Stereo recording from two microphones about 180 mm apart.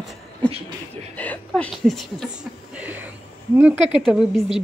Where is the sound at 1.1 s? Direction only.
10° left (ahead or behind); by 3.0 s 10° right (ahead or behind).